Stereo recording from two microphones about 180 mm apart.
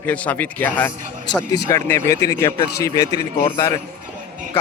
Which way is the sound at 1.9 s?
15° left (ahead or behind).